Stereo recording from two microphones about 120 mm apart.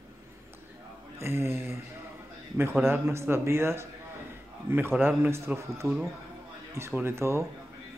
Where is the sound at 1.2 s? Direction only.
20° right (ahead or behind).